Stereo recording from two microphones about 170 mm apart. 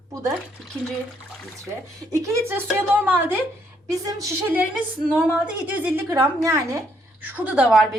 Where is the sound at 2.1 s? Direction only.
15° right (ahead or behind).